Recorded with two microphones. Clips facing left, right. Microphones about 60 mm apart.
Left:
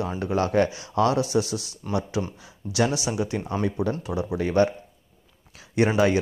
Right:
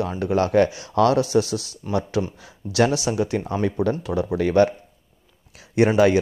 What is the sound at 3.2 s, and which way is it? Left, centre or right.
Speech, right.